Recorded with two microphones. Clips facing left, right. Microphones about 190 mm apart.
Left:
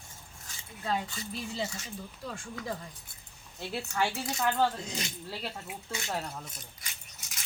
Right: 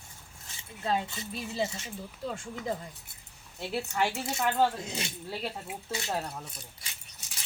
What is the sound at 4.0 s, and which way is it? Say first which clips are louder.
Speech: even; 25° right (ahead or behind).